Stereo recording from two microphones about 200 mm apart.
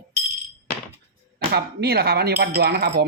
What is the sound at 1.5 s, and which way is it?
Speech, 55° right (ahead or behind).